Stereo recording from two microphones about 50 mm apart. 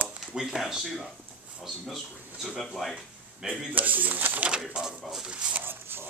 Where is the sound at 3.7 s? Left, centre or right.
Right.